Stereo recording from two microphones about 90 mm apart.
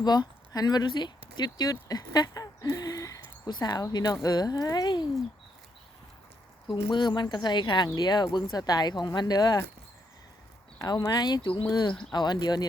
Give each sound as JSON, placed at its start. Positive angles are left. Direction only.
{"t": 0.0, "sound": "speech", "side_deg": 50}
{"t": 1.4, "sound": "a sound", "side_deg": 50}
{"t": 3.5, "sound": "speech", "side_deg": 50}
{"t": 6.7, "sound": "speech", "side_deg": 60}
{"t": 10.8, "sound": "speech", "side_deg": 45}